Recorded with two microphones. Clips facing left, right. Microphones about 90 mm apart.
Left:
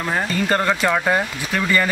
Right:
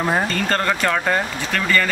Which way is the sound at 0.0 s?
15° right (ahead or behind).